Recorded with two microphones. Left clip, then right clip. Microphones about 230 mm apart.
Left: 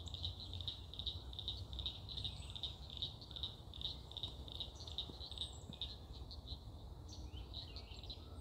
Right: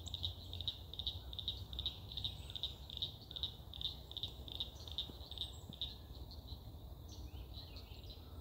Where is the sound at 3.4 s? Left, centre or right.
Right.